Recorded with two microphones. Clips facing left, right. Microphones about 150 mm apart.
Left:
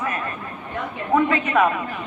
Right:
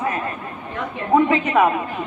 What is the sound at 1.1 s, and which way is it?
Speech, 20° right (ahead or behind).